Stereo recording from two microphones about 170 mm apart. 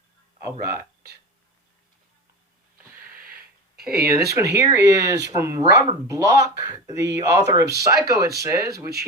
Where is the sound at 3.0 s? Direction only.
60° right (ahead or behind).